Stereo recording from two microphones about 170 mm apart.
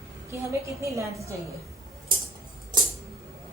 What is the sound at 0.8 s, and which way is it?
Speech, 20° right (ahead or behind).